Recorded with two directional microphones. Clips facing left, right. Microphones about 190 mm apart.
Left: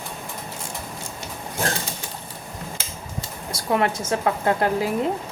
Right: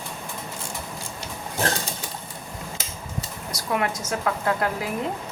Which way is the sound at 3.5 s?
30° left (ahead or behind).